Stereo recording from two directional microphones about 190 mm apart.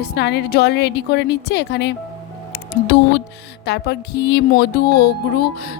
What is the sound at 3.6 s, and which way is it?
A woman's voice, 60° left (ahead or behind).